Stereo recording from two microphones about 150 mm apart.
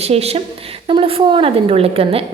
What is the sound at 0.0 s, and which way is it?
A woman's voice, 45° right (ahead or behind).